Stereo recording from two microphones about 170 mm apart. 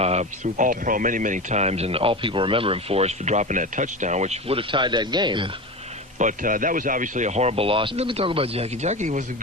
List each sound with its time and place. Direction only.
0.0 s speech: 40° right (ahead or behind)
6.1 s speech: 50° right (ahead or behind)